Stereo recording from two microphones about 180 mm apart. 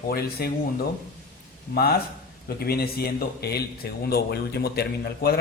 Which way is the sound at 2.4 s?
60° left (ahead or behind).